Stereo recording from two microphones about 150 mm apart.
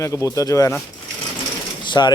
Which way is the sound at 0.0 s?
20° left (ahead or behind).